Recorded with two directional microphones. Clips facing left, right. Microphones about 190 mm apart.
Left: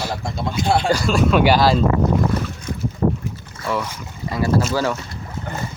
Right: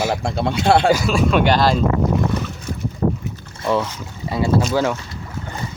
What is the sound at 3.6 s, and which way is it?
Speech, 25° right (ahead or behind).